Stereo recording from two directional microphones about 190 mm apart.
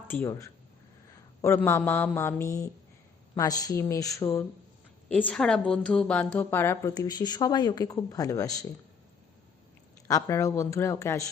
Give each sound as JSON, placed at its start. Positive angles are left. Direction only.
{"t": 0.1, "sound": "a woman's voice", "side_deg": 15}
{"t": 10.1, "sound": "a woman's voice", "side_deg": 15}